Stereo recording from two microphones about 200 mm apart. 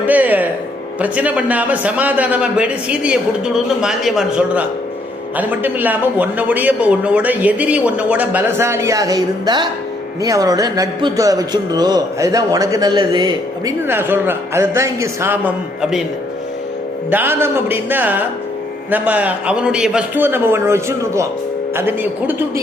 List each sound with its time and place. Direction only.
0.0 s music: 10° right (ahead or behind)
0.9 s a man's voice: 5° right (ahead or behind)
17.1 s a man's voice: 10° right (ahead or behind)